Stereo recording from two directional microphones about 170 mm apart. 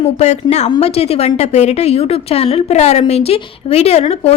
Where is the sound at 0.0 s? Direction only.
40° left (ahead or behind).